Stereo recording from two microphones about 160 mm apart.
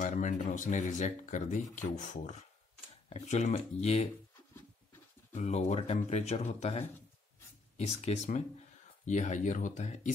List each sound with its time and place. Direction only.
0.0 s speech: 50° left (ahead or behind)
5.3 s speech: 45° left (ahead or behind)